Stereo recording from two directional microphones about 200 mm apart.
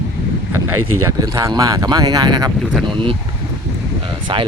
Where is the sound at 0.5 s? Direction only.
90° right.